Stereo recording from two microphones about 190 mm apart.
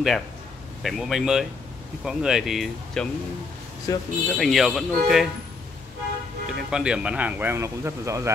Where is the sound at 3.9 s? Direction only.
20° left (ahead or behind).